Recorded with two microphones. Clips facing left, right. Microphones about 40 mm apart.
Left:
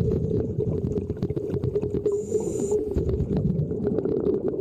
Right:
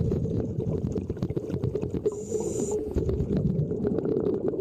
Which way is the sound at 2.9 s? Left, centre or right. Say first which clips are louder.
Left 2 dB; centre.